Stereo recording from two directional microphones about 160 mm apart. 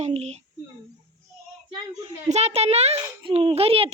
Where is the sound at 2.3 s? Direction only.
40° right (ahead or behind).